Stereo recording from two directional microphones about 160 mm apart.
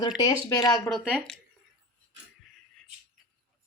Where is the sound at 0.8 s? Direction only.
Centre (ahead or behind).